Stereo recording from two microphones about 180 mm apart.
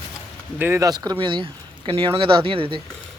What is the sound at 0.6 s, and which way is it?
Speech, 15° right (ahead or behind).